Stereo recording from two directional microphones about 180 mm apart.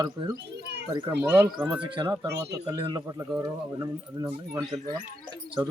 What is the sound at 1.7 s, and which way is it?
Speech, 25° right (ahead or behind).